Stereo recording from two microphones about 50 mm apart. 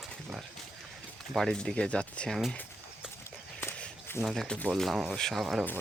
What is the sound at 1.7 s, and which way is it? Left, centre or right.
Speech, left.